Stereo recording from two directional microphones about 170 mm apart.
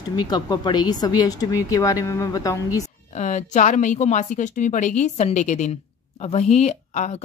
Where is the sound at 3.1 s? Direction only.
45° left (ahead or behind).